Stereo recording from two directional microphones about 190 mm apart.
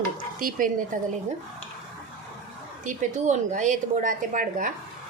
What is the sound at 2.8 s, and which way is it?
A woman's voice, 40° right (ahead or behind).